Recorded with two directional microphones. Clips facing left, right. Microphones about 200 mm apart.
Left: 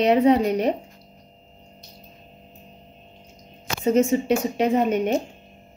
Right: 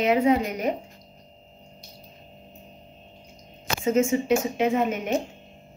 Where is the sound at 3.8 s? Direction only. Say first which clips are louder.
Left 3 dB; 35° left (ahead or behind).